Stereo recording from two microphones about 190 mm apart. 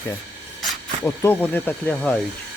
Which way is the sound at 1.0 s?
10° left (ahead or behind).